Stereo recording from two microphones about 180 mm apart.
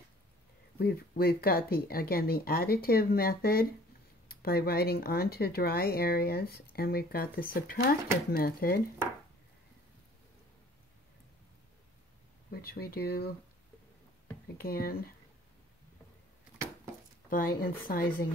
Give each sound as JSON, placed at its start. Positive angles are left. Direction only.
{"t": 0.7, "sound": "speech", "side_deg": 60}
{"t": 12.4, "sound": "speech", "side_deg": 60}
{"t": 14.6, "sound": "speech", "side_deg": 55}
{"t": 17.3, "sound": "speech", "side_deg": 50}